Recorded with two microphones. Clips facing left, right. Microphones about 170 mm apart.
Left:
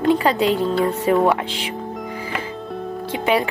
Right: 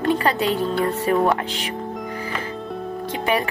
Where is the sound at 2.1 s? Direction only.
10° left (ahead or behind).